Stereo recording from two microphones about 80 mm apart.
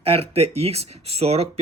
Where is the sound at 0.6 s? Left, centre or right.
Right.